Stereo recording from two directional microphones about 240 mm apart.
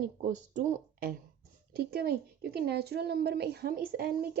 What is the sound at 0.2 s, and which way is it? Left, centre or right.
A woman's voice, right.